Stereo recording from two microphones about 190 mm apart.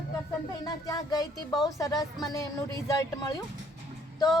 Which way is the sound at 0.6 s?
20° left (ahead or behind).